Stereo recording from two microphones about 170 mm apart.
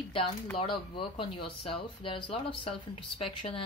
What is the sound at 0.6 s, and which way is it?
Speech, 30° left (ahead or behind).